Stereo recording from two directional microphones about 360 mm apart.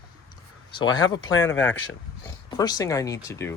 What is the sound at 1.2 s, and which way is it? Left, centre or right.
Speech, left.